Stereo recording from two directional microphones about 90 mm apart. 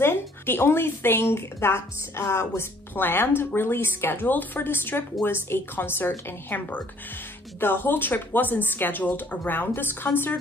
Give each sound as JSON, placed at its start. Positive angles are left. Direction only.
{"t": 0.0, "sound": "speech", "side_deg": 25}